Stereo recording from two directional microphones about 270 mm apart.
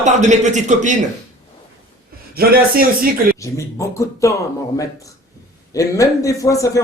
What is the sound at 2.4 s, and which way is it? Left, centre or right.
Speech, right.